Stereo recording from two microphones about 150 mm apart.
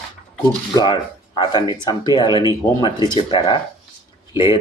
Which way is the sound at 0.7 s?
30° left (ahead or behind).